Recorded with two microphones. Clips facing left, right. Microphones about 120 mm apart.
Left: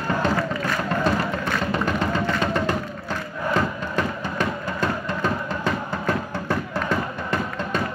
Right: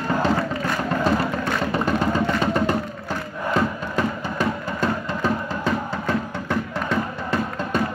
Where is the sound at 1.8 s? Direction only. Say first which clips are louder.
Right 2 dB; 10° right (ahead or behind).